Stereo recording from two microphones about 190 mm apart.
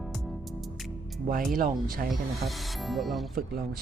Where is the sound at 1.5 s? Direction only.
45° right (ahead or behind).